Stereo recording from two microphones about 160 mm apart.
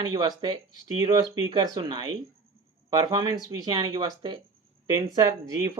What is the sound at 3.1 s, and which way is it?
Speech, 30° right (ahead or behind).